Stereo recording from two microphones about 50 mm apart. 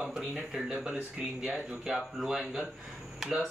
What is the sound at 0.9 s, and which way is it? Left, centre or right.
Speech, right.